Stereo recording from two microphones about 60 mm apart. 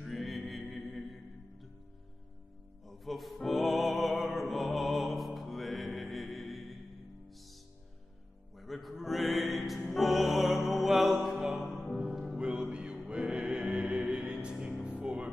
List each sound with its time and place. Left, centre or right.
0.0 s music: centre
2.9 s music: centre
8.5 s music: centre